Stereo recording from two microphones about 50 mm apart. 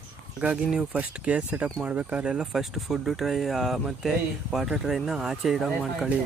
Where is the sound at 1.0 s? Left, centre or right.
Right.